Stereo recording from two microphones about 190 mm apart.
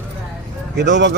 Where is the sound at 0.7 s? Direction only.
65° right (ahead or behind).